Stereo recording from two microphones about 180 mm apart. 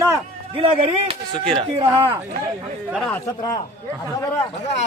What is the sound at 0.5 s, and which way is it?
Speech, 35° right (ahead or behind).